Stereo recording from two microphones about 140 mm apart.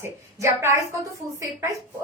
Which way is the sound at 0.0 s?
20° right (ahead or behind).